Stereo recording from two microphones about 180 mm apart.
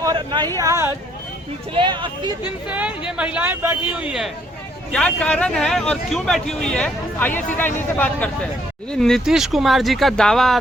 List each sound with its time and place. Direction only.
0.0 s a sound: 25° right (ahead or behind)
0.6 s speech: 15° right (ahead or behind)
1.7 s speech: 25° right (ahead or behind)
2.6 s speech: 5° right (ahead or behind)
4.9 s speech: 5° left (ahead or behind)